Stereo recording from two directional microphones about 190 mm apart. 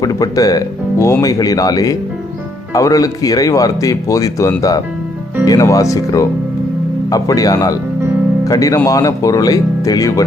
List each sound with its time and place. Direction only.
0.0 s speech: 20° left (ahead or behind)